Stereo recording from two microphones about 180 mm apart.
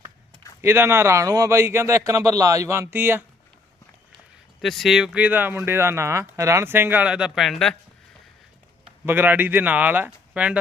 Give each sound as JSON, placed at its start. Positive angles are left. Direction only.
{"t": 0.6, "sound": "speech", "side_deg": -15}
{"t": 4.6, "sound": "speech", "side_deg": 0}
{"t": 9.0, "sound": "speech", "side_deg": -10}